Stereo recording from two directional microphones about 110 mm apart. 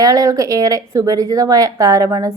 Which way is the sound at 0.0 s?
35° right (ahead or behind).